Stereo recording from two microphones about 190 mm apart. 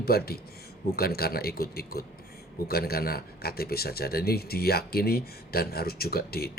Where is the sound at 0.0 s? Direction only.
55° left (ahead or behind).